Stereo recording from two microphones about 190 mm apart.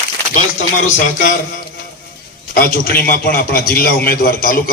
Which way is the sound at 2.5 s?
50° left (ahead or behind).